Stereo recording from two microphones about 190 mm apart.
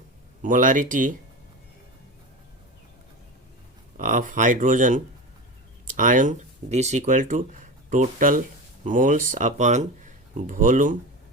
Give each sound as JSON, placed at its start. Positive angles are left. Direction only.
{"t": 0.4, "sound": "speech", "side_deg": -45}
{"t": 3.9, "sound": "speech", "side_deg": -40}